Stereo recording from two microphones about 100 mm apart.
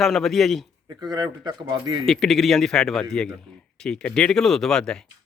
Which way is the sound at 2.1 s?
5° left (ahead or behind).